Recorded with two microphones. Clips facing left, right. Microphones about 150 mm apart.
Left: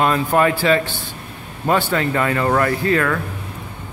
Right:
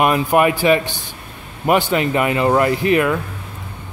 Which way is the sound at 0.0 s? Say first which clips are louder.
Right 2 dB; 15° right (ahead or behind).